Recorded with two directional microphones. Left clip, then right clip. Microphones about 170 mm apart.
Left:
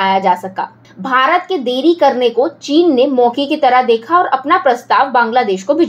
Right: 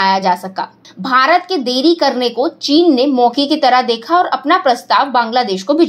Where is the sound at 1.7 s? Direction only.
35° right (ahead or behind).